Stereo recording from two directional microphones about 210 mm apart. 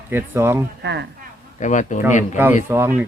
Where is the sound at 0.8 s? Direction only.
55° right (ahead or behind).